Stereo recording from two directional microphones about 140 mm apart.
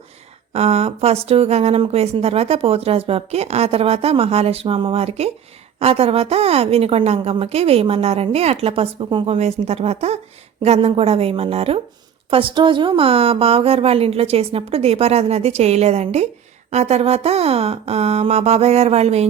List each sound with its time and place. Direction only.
0.5 s a woman's voice: 50° right (ahead or behind)